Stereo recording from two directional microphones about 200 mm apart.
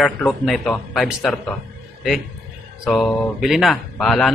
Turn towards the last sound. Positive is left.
turn(degrees=0)  # may be behind; listen again after turning